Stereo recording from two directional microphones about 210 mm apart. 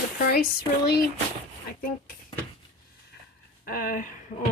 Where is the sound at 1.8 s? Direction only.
45° left (ahead or behind).